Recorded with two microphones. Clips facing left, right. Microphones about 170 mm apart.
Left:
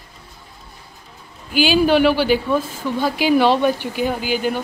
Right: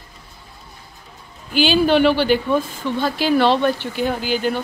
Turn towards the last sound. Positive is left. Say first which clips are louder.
# even
turn(degrees=5)  # may be behind; listen again after turning